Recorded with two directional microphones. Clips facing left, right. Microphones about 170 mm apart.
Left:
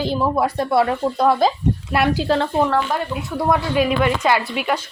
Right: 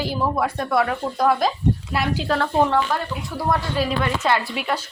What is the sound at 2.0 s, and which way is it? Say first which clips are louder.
Speech: left 9 dB; 60° left (ahead or behind).